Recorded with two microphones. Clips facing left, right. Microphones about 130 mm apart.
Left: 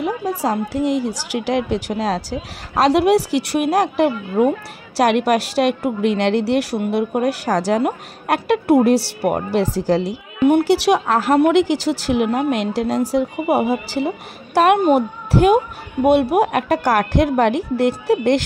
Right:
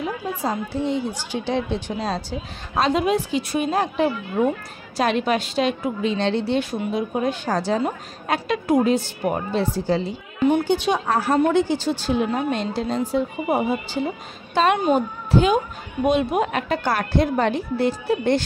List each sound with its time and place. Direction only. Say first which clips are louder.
0.4 s a woman's voice: left 4 dB; 90° left
14.5 s a woman's voice: left 5 dB; 70° left (ahead or behind); by 18.3 s 90° left